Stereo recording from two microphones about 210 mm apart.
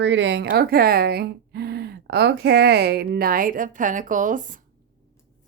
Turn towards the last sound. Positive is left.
turn(degrees=-40)  # may be behind; listen again after turning